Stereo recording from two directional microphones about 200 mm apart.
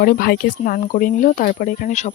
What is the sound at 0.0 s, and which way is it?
Speech, 45° left (ahead or behind).